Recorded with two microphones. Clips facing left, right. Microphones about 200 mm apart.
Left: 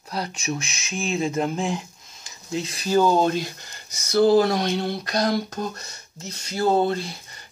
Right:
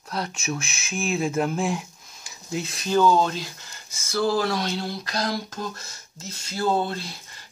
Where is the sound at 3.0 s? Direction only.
45° left (ahead or behind).